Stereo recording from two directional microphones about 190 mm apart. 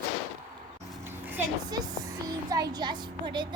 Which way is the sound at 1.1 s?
15° right (ahead or behind).